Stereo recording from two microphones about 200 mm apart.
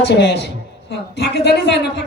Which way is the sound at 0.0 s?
60° left (ahead or behind).